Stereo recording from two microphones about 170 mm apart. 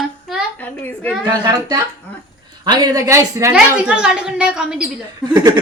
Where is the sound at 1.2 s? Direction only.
25° right (ahead or behind).